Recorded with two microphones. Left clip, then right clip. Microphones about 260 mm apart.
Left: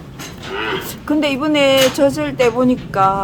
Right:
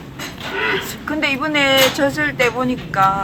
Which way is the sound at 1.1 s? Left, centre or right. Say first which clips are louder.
Left 2 dB; left.